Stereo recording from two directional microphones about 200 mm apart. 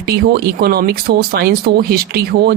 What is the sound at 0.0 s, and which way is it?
Speech, 50° right (ahead or behind).